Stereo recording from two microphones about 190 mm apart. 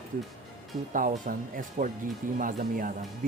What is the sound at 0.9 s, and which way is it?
Speech, 45° right (ahead or behind).